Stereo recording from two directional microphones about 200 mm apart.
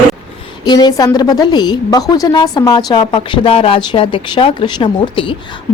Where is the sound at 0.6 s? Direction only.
20° left (ahead or behind).